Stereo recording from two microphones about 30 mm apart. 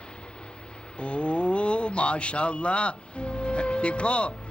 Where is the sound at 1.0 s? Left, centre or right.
Left.